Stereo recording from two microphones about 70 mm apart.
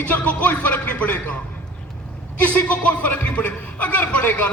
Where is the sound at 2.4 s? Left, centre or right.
Left.